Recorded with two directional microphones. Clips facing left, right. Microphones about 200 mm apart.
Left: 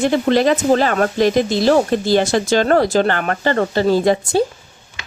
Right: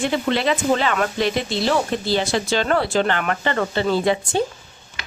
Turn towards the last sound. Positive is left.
turn(degrees=40)  # may be behind; listen again after turning